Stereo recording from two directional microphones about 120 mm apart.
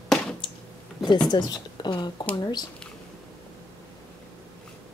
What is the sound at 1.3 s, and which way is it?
Speech, 35° left (ahead or behind).